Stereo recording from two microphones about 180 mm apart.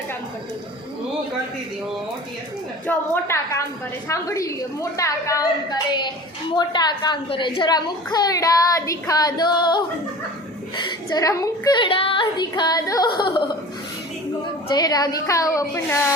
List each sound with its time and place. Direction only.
2.8 s a woman's voice: 15° left (ahead or behind)
14.7 s a woman's voice: 20° left (ahead or behind)